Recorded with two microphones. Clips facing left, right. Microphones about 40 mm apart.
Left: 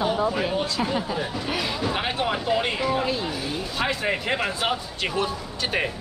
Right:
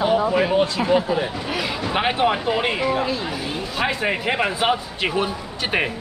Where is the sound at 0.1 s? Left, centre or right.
Right.